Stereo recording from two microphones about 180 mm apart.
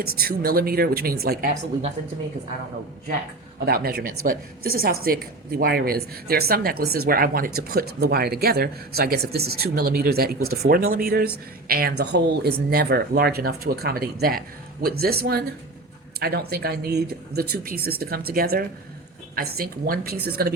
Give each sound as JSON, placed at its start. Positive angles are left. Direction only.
{"t": 0.0, "sound": "a woman's voice", "side_deg": -55}
{"t": 3.7, "sound": "a woman's voice", "side_deg": -55}